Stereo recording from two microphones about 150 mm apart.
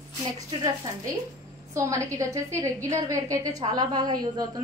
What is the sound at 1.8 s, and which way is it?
A woman's voice, 20° right (ahead or behind).